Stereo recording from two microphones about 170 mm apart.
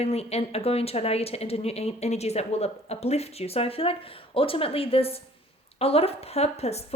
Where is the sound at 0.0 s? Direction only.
35° left (ahead or behind).